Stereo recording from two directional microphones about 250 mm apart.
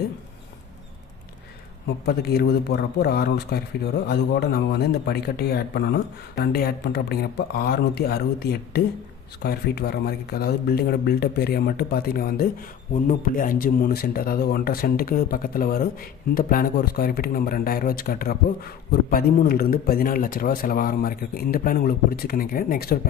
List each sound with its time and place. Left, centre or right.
2.0 s speech: left